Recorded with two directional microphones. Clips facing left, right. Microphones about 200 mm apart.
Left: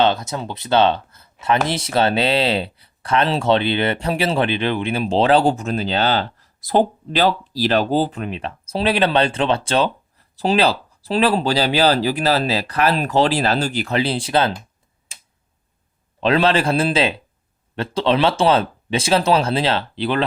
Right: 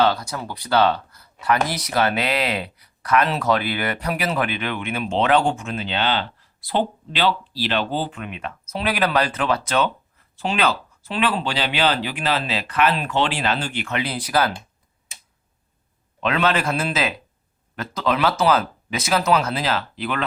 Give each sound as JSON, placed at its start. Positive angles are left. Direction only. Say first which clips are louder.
{"t": 0.0, "sound": "speech", "louder": "left 2 dB", "side_deg": 25}
{"t": 16.2, "sound": "speech", "louder": "left 4 dB", "side_deg": 30}